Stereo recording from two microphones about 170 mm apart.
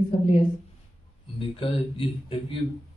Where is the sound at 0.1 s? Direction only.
35° left (ahead or behind).